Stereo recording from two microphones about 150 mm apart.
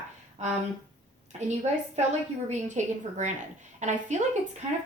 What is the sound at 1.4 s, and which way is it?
Speech, 50° right (ahead or behind).